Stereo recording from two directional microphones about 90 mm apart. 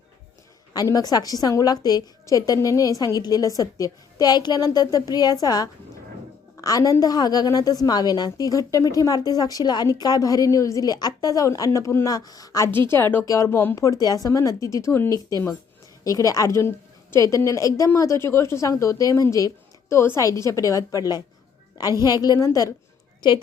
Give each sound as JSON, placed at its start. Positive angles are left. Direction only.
{"t": 0.7, "sound": "a woman's voice", "side_deg": 40}
{"t": 12.9, "sound": "speech", "side_deg": 25}
{"t": 13.2, "sound": "a woman's voice", "side_deg": 40}
{"t": 15.1, "sound": "a woman's voice", "side_deg": 40}
{"t": 16.6, "sound": "a woman's voice", "side_deg": 30}
{"t": 23.2, "sound": "a woman's voice", "side_deg": 50}